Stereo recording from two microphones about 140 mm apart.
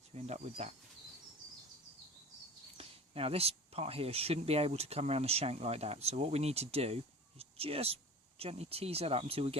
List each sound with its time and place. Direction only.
0.1 s speech: 50° right (ahead or behind)
2.7 s speech: 45° right (ahead or behind)